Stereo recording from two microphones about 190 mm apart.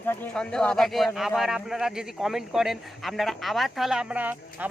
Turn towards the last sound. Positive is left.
turn(degrees=-10)  # may be behind; listen again after turning